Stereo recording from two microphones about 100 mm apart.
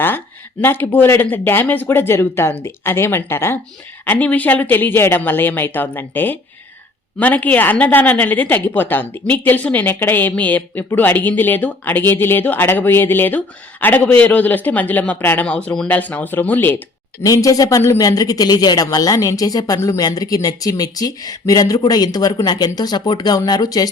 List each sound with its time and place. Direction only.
0.6 s a woman's voice: 20° left (ahead or behind)
17.2 s speech: 35° left (ahead or behind)